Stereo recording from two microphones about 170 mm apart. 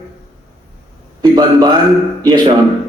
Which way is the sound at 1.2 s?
25° right (ahead or behind).